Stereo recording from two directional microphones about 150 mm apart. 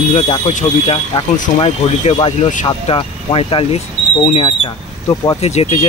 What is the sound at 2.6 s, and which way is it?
Speech, 35° left (ahead or behind).